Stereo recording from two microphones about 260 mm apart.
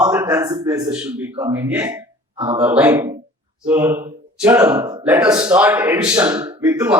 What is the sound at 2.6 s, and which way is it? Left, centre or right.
A man's voice, centre.